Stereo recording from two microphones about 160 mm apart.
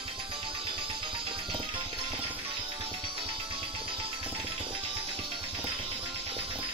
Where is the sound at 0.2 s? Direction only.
30° right (ahead or behind).